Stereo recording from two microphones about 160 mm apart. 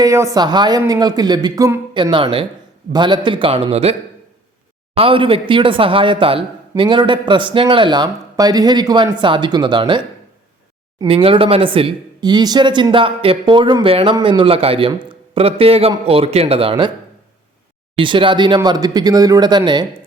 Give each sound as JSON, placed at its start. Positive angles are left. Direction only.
{"t": 0.0, "sound": "speech", "side_deg": -20}
{"t": 4.9, "sound": "speech", "side_deg": -35}
{"t": 11.0, "sound": "speech", "side_deg": -35}
{"t": 17.9, "sound": "speech", "side_deg": -30}